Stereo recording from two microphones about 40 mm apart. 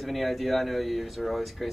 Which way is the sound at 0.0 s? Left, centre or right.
Centre.